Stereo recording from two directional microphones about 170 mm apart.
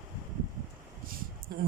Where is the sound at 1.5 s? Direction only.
60° right (ahead or behind).